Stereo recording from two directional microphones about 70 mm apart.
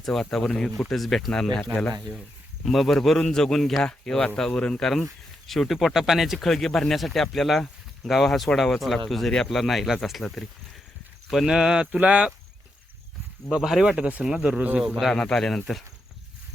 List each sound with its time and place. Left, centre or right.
0.0 s speech: centre
2.6 s speech: centre
11.3 s speech: centre
13.6 s speech: centre
13.8 s speech: centre
14.9 s speech: centre